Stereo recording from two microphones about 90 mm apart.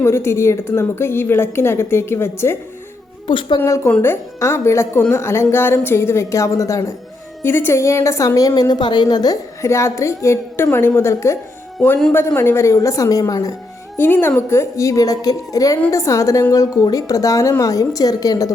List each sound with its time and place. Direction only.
0.0 s a woman's voice: 30° left (ahead or behind)
3.2 s a woman's voice: 60° left (ahead or behind)
4.0 s a woman's voice: 30° left (ahead or behind)
7.4 s a woman's voice: 25° left (ahead or behind); by 9.4 s 45° left (ahead or behind)
9.6 s a woman's voice: 30° left (ahead or behind)
13.9 s a woman's voice: 25° left (ahead or behind); by 18.5 s 45° left (ahead or behind)